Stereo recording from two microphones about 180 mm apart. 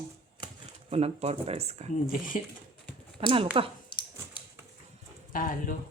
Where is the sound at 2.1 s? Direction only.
50° left (ahead or behind).